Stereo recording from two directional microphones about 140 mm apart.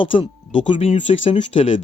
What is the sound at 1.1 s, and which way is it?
Speech, 50° left (ahead or behind).